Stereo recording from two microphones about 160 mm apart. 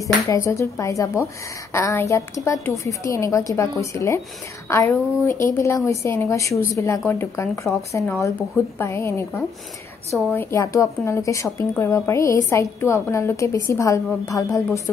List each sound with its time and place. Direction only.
0.3 s a woman's voice: 20° left (ahead or behind)
10.3 s a woman's voice: 15° left (ahead or behind)